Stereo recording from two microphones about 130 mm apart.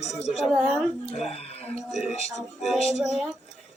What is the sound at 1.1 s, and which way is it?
Speech, 55° left (ahead or behind).